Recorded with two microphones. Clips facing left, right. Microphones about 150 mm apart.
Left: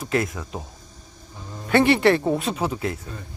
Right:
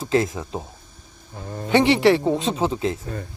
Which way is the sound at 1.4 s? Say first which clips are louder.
Right 7 dB; 65° right (ahead or behind).